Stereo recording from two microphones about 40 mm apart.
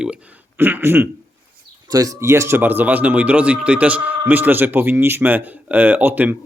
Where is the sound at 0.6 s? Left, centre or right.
Right.